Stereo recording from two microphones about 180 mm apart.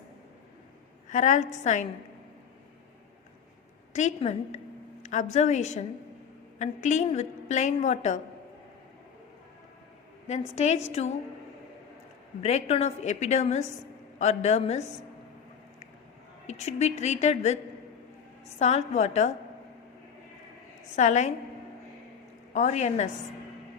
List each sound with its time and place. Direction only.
1.1 s a woman's voice: 40° left (ahead or behind)
3.9 s a woman's voice: 40° left (ahead or behind)
10.2 s a woman's voice: 40° left (ahead or behind)
12.4 s a woman's voice: 35° left (ahead or behind)
16.5 s a woman's voice: 35° left (ahead or behind)
18.6 s a woman's voice: 40° left (ahead or behind)
20.9 s a woman's voice: 40° left (ahead or behind)
22.5 s a woman's voice: 40° left (ahead or behind)